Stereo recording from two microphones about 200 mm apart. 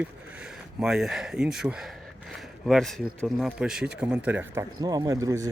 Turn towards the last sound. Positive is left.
turn(degrees=-15)  # may be behind; listen again after turning